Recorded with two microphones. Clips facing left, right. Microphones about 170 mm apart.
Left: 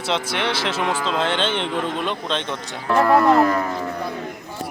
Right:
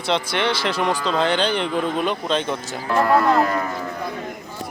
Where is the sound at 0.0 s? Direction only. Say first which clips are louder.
Right 2 dB; 5° left (ahead or behind).